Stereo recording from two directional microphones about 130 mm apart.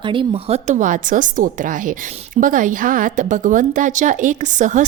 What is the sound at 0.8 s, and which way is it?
A woman's voice, 80° right.